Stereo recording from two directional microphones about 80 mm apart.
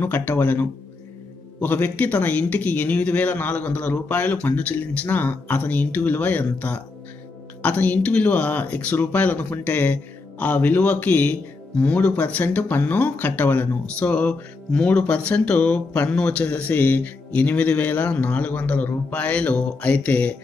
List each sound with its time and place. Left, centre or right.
0.0 s a man's voice: left